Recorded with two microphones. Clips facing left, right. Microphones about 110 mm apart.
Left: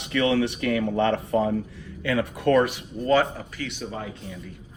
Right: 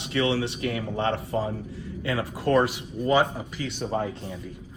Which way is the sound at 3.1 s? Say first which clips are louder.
Left 2 dB; 15° right (ahead or behind).